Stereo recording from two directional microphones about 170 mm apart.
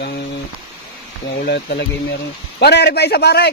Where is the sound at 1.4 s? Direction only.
70° left (ahead or behind).